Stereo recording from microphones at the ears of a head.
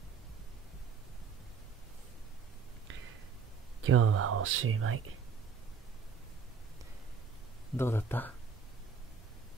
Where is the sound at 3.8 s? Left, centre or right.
Right.